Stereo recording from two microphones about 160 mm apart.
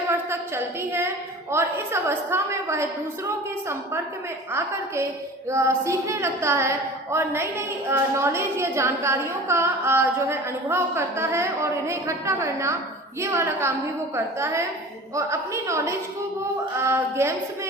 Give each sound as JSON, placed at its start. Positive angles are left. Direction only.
{"t": 0.1, "sound": "a woman's voice", "side_deg": -15}
{"t": 5.5, "sound": "a woman's voice", "side_deg": -20}